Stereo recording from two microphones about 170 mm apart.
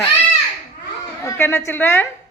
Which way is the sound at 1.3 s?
15° left (ahead or behind).